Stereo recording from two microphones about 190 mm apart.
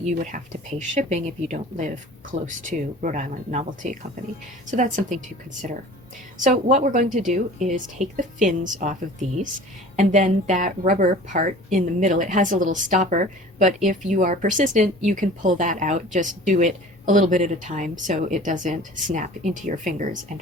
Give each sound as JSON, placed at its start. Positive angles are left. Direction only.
{"t": 0.0, "sound": "a woman's voice", "side_deg": -40}
{"t": 6.4, "sound": "a woman's voice", "side_deg": -40}